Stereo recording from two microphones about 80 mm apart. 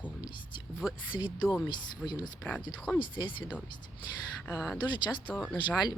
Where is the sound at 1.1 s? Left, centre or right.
Left.